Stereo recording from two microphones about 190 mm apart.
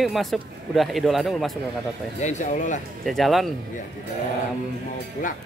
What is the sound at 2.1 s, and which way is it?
Speech, 40° left (ahead or behind).